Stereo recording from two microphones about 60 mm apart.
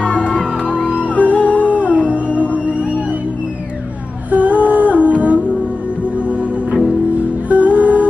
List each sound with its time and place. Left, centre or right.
0.0 s music: centre
1.7 s music: right
4.3 s humming: right
7.4 s music: right